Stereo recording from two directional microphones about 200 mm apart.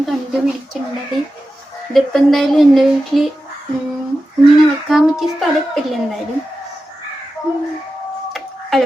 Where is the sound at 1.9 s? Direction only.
Centre (ahead or behind).